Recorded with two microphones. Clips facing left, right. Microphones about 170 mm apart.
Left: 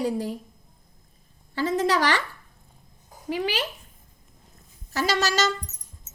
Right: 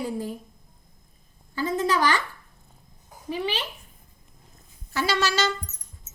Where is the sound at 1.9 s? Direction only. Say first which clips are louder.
Even; 90° left.